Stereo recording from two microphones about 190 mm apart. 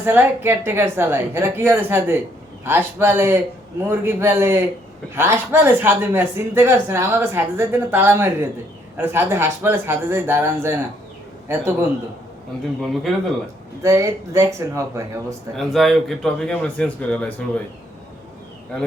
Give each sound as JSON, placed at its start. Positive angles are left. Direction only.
{"t": 0.0, "sound": "speech", "side_deg": -10}
{"t": 12.8, "sound": "a man's voice", "side_deg": 0}
{"t": 13.8, "sound": "speech", "side_deg": -15}
{"t": 15.5, "sound": "a man's voice", "side_deg": 0}